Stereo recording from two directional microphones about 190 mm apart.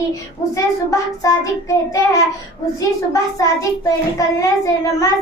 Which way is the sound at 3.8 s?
15° left (ahead or behind).